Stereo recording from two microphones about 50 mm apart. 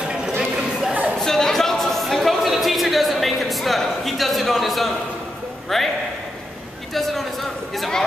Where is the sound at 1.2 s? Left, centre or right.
Centre.